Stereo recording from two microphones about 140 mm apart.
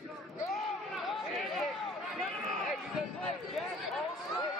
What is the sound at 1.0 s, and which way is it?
Chatter, centre (ahead or behind).